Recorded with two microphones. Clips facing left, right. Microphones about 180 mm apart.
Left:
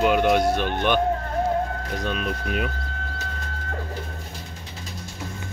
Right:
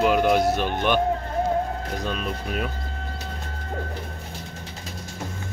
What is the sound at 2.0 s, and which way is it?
Speech, centre (ahead or behind).